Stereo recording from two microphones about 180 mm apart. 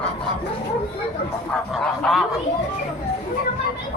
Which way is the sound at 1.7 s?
Centre (ahead or behind).